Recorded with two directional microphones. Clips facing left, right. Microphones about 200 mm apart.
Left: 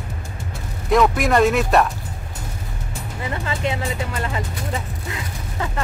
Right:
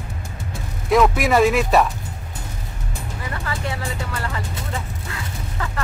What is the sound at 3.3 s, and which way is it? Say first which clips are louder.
Speech: left 4 dB; 20° left (ahead or behind).